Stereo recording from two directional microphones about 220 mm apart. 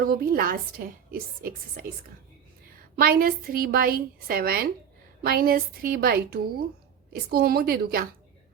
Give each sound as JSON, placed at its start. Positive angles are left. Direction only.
{"t": 0.0, "sound": "a woman's voice", "side_deg": -40}